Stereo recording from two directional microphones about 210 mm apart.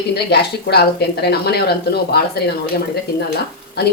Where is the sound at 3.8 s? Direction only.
50° left (ahead or behind).